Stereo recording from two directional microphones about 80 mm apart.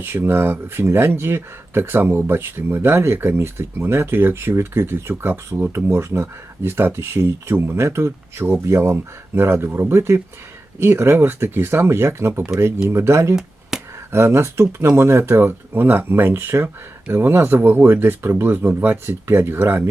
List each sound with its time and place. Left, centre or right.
0.0 s speech: right
13.3 s a sound: centre
14.1 s speech: right